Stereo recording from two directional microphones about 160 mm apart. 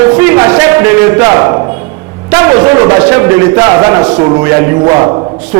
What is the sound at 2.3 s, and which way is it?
A man's voice, 15° right (ahead or behind).